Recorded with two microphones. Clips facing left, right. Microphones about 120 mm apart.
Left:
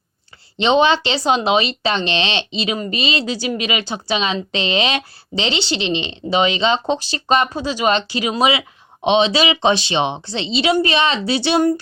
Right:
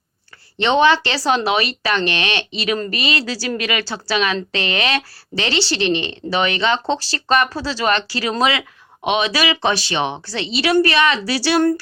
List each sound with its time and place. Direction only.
0.6 s speech: 20° left (ahead or behind)